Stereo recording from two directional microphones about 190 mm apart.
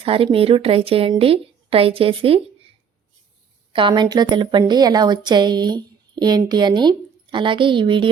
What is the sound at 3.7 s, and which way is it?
A woman's voice, 25° right (ahead or behind).